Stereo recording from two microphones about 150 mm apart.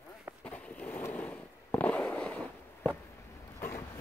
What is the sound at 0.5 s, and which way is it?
Fireworks, 10° left (ahead or behind).